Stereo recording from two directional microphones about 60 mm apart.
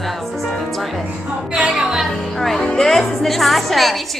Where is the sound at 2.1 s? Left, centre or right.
Centre.